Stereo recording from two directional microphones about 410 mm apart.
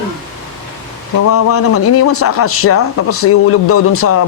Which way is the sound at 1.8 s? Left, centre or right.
Left.